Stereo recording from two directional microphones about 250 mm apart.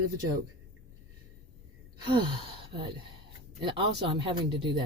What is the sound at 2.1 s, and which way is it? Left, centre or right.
Speech, centre.